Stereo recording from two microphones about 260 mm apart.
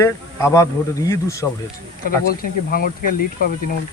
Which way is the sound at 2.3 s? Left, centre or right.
Left.